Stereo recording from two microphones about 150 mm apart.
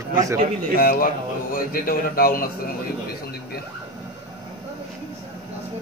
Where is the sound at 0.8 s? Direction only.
70° left (ahead or behind).